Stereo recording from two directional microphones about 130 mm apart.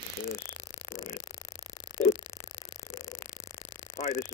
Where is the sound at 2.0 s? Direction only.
20° left (ahead or behind).